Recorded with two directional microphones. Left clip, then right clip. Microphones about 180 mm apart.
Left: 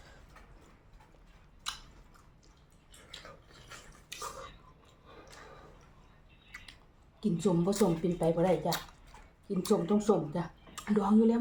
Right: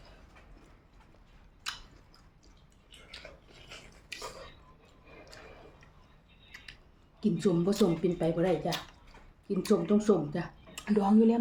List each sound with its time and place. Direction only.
7.2 s speech: 20° right (ahead or behind)